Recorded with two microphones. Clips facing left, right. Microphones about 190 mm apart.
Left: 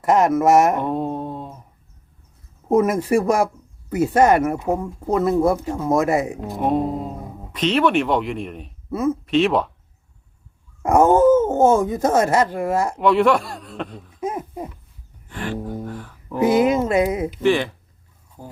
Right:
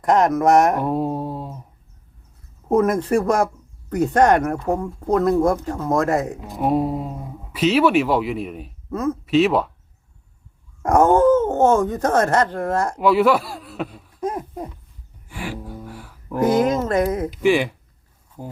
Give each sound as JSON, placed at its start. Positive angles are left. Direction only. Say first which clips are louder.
{"t": 0.0, "sound": "speech", "louder": "even", "side_deg": 5}
{"t": 2.6, "sound": "speech", "louder": "even", "side_deg": 10}
{"t": 6.6, "sound": "speech", "louder": "right 1 dB", "side_deg": -5}
{"t": 8.9, "sound": "speech", "louder": "left 2 dB", "side_deg": 10}
{"t": 9.2, "sound": "speech", "louder": "right 4 dB", "side_deg": -5}
{"t": 10.8, "sound": "speech", "louder": "left 1 dB", "side_deg": 10}
{"t": 13.0, "sound": "a man's voice", "louder": "right 1 dB", "side_deg": -5}
{"t": 14.2, "sound": "a sound", "louder": "right 1 dB", "side_deg": 5}
{"t": 15.3, "sound": "speech", "louder": "left 4 dB", "side_deg": -10}
{"t": 16.4, "sound": "speech", "louder": "left 1 dB", "side_deg": 10}
{"t": 17.4, "sound": "speech", "louder": "right 1 dB", "side_deg": -10}